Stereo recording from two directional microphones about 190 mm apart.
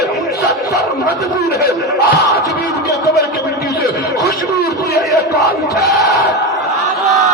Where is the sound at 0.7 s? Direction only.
20° right (ahead or behind).